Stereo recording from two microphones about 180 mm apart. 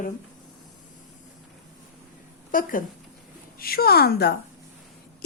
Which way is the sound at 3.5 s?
55° left (ahead or behind).